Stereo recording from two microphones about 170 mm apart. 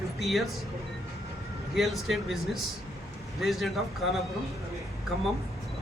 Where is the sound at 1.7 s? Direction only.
Centre (ahead or behind).